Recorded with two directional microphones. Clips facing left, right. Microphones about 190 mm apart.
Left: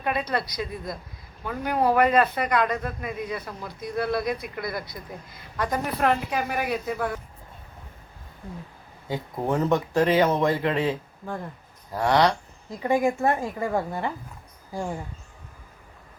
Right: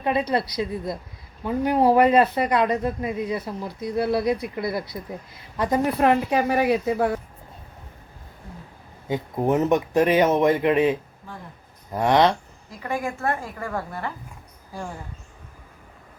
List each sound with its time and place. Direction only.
0.0 s speech: 25° right (ahead or behind)
9.0 s speech: 20° right (ahead or behind)
12.8 s a woman's voice: 15° left (ahead or behind)